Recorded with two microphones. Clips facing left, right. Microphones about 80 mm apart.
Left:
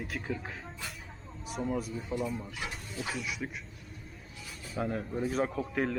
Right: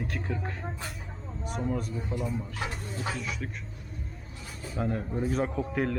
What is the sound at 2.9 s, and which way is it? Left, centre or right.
Speech, right.